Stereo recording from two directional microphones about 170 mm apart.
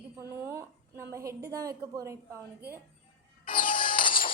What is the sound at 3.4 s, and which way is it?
Music, 55° left (ahead or behind).